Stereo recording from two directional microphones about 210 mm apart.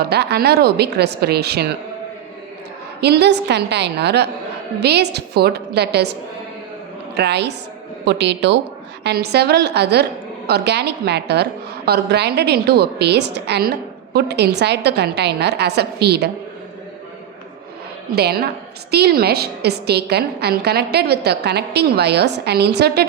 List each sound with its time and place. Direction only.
0.0 s a woman's voice: 50° right (ahead or behind)
3.0 s a woman's voice: 50° right (ahead or behind)
7.2 s a woman's voice: 55° right (ahead or behind)
18.1 s a woman's voice: 50° right (ahead or behind)